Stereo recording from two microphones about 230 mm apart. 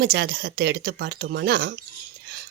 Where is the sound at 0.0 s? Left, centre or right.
Right.